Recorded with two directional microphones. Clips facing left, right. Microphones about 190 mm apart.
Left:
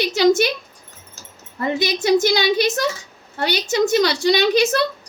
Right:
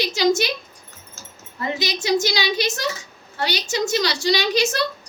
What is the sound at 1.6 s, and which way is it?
A woman's voice, 55° left (ahead or behind).